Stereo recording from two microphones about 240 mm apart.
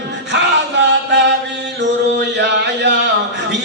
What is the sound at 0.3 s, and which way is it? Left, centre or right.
Chant, right.